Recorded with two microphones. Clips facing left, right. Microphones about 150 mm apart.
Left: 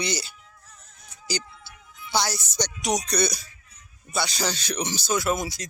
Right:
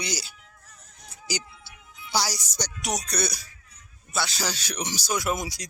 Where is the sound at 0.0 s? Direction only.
10° right (ahead or behind).